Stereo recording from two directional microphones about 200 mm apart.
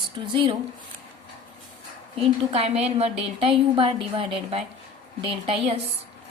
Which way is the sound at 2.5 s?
30° right (ahead or behind).